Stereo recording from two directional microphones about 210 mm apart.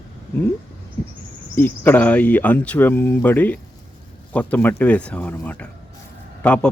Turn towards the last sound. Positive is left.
turn(degrees=5)  # may be behind; listen again after turning